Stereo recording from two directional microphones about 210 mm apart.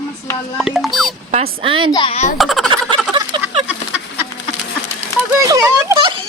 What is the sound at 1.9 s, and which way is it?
Speech, 25° left (ahead or behind).